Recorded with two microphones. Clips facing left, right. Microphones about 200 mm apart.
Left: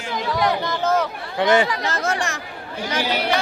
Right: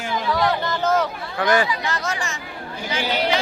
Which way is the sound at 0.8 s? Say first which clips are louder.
Even; 10° left (ahead or behind).